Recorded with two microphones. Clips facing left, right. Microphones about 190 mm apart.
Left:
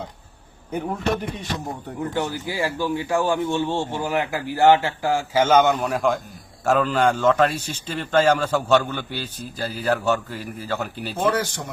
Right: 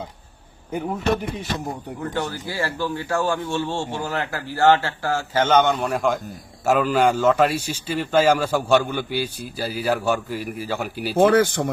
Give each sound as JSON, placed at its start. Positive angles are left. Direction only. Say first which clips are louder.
{"t": 0.7, "sound": "a man's voice", "louder": "even", "side_deg": -5}
{"t": 2.0, "sound": "a man's voice", "louder": "left 3 dB", "side_deg": 15}
{"t": 11.2, "sound": "speech", "louder": "right 7 dB", "side_deg": -55}